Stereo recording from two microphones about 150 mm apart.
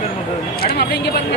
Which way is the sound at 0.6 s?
90° left.